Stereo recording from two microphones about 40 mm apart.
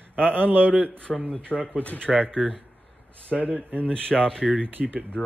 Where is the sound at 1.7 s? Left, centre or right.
Left.